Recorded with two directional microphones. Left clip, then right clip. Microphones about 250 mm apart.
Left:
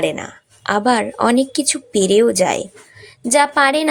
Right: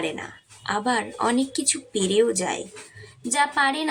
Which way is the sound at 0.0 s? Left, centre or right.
Left.